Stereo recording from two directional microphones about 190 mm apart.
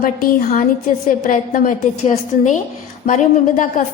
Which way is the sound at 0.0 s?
45° left (ahead or behind).